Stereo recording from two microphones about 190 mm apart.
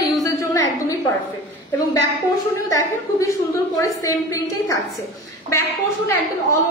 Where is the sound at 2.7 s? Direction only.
15° left (ahead or behind).